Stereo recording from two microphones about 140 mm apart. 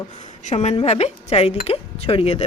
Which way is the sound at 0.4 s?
50° left (ahead or behind).